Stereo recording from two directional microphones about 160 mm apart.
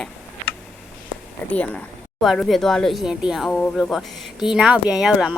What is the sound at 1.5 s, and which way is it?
Speech, 5° left (ahead or behind).